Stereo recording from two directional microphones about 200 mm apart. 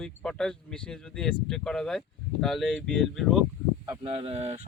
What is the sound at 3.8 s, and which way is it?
Speech, 20° right (ahead or behind).